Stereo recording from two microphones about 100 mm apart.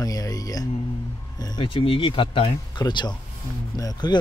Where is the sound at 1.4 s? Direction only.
55° left (ahead or behind).